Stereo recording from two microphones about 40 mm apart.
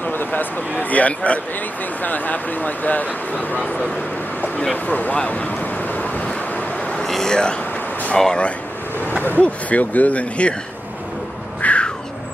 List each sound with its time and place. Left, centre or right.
0.0 s a sound: left
0.7 s speech: left
4.8 s speech: left
5.3 s vehicle: left
6.2 s vehicle: left
7.1 s a sound: centre
8.2 s speech: centre
9.4 s speech: left
11.6 s a sound: left